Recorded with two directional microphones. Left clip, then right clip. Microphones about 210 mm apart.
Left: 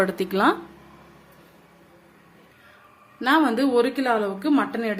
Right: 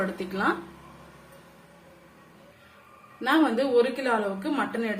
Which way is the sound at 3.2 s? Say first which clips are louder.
Left 3 dB; 50° left (ahead or behind).